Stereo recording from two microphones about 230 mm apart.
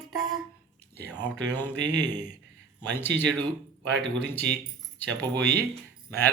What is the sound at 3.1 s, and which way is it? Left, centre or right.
Speech, right.